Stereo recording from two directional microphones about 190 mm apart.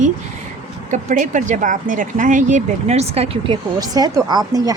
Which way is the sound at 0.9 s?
40° right (ahead or behind).